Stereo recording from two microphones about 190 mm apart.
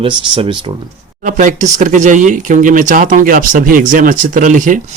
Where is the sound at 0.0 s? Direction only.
30° right (ahead or behind).